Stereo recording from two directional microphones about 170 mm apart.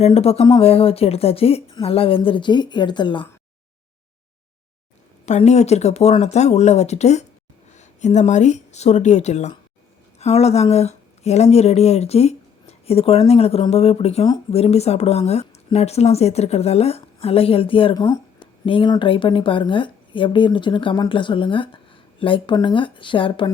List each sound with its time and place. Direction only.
0.0 s speech: 35° left (ahead or behind)
5.2 s speech: 40° left (ahead or behind)